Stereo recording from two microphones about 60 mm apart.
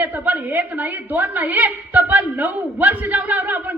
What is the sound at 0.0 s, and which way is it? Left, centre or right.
A woman's voice, right.